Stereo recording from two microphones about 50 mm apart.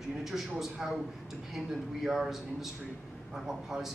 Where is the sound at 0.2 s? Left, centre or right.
Centre.